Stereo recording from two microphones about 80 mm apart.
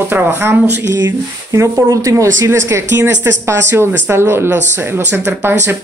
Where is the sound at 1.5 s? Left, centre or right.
Right.